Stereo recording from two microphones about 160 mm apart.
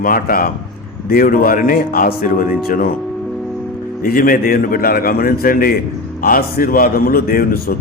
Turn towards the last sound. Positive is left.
turn(degrees=65)  # may be behind; listen again after turning